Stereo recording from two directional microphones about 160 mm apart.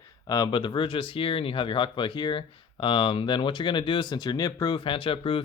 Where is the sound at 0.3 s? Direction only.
25° left (ahead or behind).